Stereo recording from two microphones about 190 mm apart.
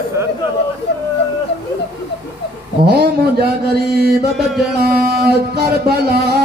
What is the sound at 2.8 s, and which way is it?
Mantra, 55° right (ahead or behind).